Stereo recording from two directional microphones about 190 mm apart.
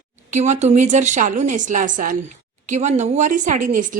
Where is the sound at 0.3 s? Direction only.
40° right (ahead or behind).